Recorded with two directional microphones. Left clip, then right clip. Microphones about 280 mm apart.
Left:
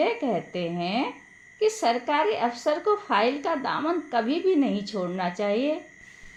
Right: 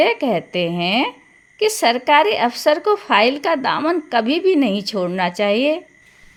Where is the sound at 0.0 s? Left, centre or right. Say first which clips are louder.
Right 9 dB; right.